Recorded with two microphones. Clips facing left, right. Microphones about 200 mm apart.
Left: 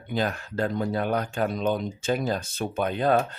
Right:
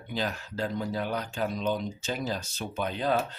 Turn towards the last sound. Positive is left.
turn(degrees=50)  # may be behind; listen again after turning